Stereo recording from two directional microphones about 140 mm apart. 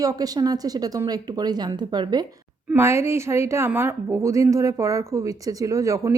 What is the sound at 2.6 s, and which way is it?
A woman's voice, 15° right (ahead or behind).